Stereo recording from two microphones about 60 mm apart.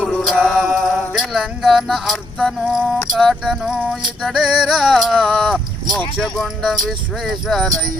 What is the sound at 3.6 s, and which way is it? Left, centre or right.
Music, centre.